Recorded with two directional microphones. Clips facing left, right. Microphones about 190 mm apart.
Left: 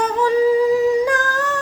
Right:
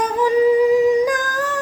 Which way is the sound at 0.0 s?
15° right (ahead or behind).